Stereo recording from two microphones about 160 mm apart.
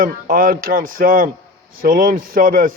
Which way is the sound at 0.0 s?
65° right (ahead or behind).